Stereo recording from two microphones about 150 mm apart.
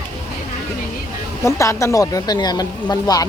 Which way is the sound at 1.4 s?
20° left (ahead or behind).